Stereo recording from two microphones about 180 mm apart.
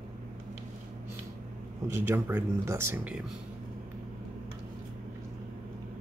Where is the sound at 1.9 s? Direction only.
10° right (ahead or behind).